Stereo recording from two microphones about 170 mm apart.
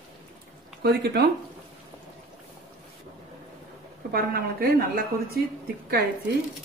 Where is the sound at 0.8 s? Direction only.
70° right (ahead or behind).